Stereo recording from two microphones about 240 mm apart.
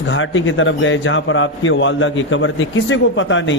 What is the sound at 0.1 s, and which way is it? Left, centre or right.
A man's voice, left.